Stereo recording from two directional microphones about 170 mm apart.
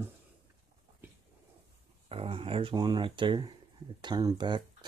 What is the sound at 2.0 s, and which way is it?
Speech, 35° right (ahead or behind).